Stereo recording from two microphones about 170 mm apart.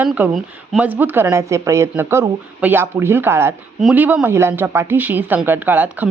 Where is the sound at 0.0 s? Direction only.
10° right (ahead or behind).